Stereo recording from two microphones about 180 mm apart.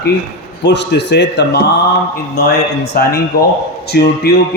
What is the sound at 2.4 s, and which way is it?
A man's voice, 60° left (ahead or behind).